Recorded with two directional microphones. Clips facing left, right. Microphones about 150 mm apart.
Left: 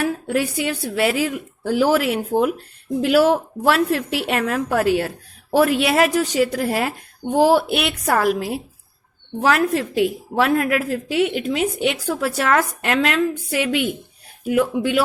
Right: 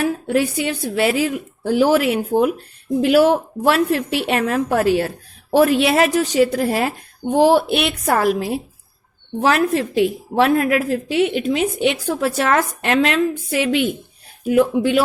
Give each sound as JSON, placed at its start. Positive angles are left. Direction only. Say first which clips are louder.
{"t": 0.0, "sound": "a woman's voice", "louder": "right 3 dB", "side_deg": -25}